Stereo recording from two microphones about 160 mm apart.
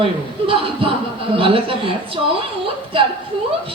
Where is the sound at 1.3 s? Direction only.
35° right (ahead or behind).